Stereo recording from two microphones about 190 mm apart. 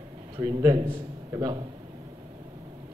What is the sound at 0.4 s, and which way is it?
A man's voice, 20° right (ahead or behind).